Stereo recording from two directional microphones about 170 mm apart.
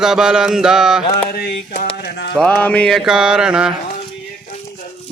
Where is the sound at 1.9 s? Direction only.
75° left (ahead or behind).